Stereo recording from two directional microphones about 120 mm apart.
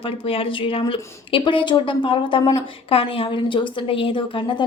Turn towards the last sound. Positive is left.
turn(degrees=45)  # may be behind; listen again after turning